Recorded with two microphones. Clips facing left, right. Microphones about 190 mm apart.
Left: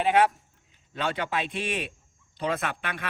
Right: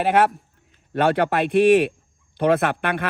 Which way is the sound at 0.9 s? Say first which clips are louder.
Right 10 dB; 60° right (ahead or behind).